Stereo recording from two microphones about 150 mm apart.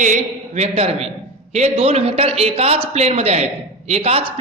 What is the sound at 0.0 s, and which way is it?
A man's voice, 55° right (ahead or behind).